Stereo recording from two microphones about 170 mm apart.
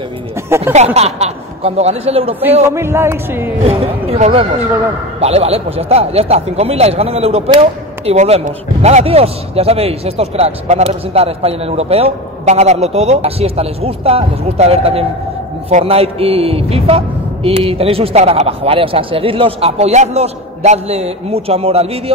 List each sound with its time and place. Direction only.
0.7 s a man's voice: 40° right (ahead or behind)
2.7 s speech: 15° right (ahead or behind)
3.6 s a man's voice: 35° right (ahead or behind)